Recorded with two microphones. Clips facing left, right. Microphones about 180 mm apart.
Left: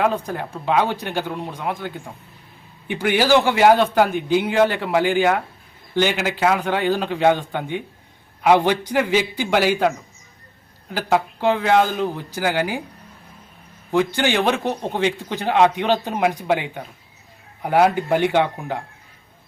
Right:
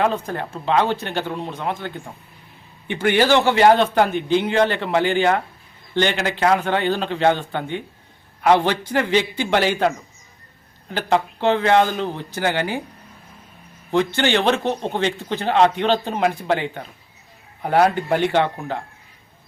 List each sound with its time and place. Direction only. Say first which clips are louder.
0.0 s a man's voice: even; 10° left (ahead or behind)
13.9 s a man's voice: even; 10° left (ahead or behind)